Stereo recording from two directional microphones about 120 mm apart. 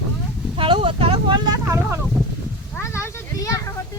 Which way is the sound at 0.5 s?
45° right (ahead or behind).